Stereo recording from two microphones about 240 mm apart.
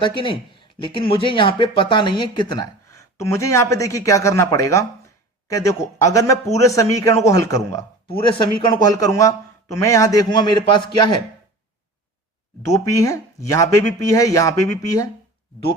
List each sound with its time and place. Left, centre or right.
0.2 s speech: left
12.6 s speech: centre